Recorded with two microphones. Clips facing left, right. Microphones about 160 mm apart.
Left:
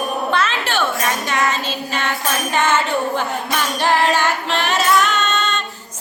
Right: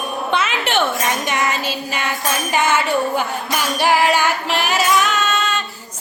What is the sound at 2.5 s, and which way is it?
Music, 10° right (ahead or behind).